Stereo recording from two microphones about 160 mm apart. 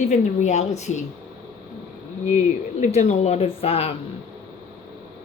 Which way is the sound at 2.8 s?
45° left (ahead or behind).